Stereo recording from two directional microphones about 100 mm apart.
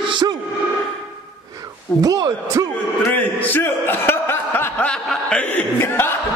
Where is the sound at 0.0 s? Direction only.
50° right (ahead or behind).